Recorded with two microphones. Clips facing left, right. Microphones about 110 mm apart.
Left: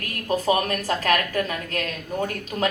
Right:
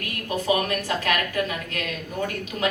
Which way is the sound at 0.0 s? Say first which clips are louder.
Left 4 dB; 40° left (ahead or behind).